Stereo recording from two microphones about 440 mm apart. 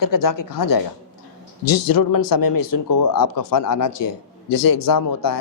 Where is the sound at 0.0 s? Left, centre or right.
Left.